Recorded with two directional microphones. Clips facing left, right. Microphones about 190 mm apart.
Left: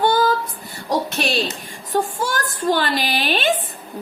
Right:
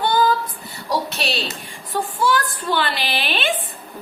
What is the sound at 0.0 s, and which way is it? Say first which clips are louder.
Female singing: left 1 dB; 45° left (ahead or behind).